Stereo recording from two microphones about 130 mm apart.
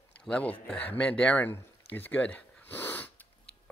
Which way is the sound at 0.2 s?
10° left (ahead or behind).